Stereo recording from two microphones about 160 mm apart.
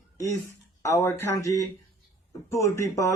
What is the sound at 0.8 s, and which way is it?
Speech, 15° left (ahead or behind).